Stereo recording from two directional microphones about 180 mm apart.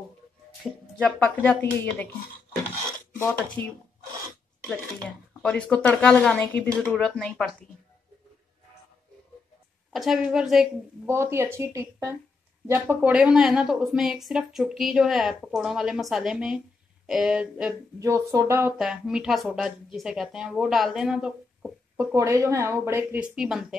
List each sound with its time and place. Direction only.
0.9 s speech: 10° left (ahead or behind)
3.6 s speech: 10° left (ahead or behind)
5.4 s speech: 5° left (ahead or behind)
9.9 s speech: centre (ahead or behind)
11.1 s speech: 15° right (ahead or behind)
17.9 s speech: 15° right (ahead or behind)
22.1 s speech: 15° right (ahead or behind)
23.3 s speech: 5° right (ahead or behind)